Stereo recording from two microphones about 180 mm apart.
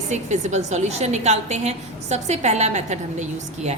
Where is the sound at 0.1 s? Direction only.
40° right (ahead or behind).